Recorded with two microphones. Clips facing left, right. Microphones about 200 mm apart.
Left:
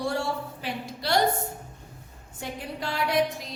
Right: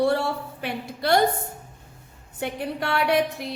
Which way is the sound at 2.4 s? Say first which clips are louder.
Right 6 dB; 65° right (ahead or behind).